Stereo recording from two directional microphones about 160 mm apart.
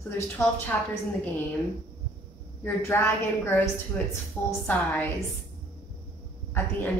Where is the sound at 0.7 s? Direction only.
10° left (ahead or behind).